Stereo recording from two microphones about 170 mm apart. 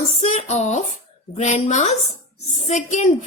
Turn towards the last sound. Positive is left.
turn(degrees=45)  # may be behind; listen again after turning